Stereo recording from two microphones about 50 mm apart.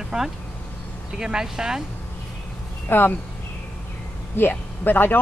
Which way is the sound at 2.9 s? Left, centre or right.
Left.